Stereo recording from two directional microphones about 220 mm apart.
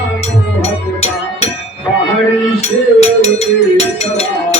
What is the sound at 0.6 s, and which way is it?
Music, 30° left (ahead or behind).